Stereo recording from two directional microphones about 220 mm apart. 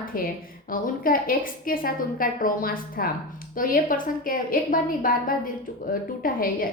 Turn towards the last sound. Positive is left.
turn(degrees=40)  # may be behind; listen again after turning